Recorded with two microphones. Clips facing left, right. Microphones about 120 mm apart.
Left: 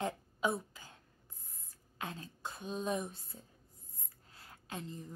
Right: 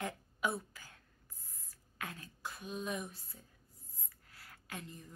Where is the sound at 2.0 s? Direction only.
25° left (ahead or behind).